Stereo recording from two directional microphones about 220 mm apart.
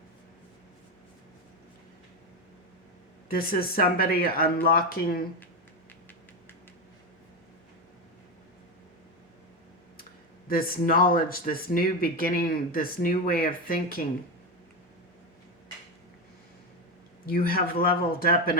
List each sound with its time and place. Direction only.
3.2 s speech: 40° left (ahead or behind)
10.5 s speech: 40° left (ahead or behind)
17.2 s speech: 40° left (ahead or behind)